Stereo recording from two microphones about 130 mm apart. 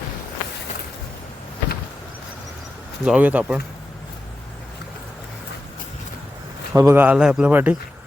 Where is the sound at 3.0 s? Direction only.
10° right (ahead or behind).